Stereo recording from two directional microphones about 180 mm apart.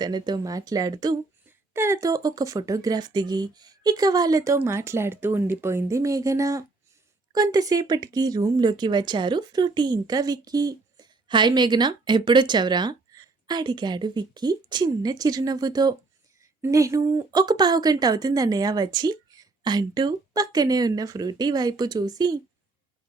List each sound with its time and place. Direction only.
0.0 s speech: 25° right (ahead or behind)